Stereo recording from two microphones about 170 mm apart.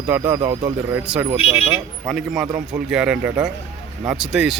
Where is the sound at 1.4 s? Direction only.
35° left (ahead or behind).